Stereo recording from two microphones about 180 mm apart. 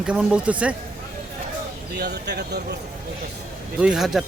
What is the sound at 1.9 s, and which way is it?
Speech, 65° right (ahead or behind).